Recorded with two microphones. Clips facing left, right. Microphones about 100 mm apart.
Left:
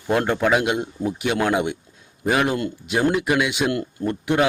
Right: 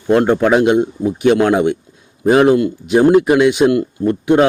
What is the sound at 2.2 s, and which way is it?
A man's voice, 30° right (ahead or behind).